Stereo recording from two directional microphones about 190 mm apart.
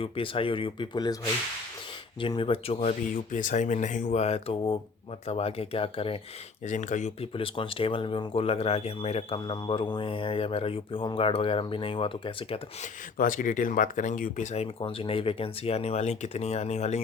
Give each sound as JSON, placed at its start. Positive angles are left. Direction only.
{"t": 0.0, "sound": "speech", "side_deg": 30}
{"t": 2.2, "sound": "speech", "side_deg": 25}
{"t": 3.3, "sound": "speech", "side_deg": 40}
{"t": 6.7, "sound": "speech", "side_deg": 40}
{"t": 13.1, "sound": "speech", "side_deg": 45}